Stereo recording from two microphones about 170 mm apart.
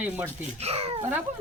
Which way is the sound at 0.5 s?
35° right (ahead or behind).